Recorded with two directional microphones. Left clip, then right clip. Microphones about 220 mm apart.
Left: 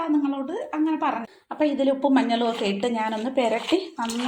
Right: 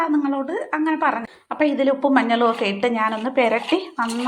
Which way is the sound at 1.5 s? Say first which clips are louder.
Right 3 dB; 5° right (ahead or behind).